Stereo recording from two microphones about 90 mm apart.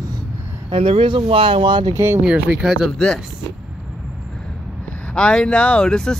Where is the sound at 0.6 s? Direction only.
90° right; by 1.9 s 60° right (ahead or behind).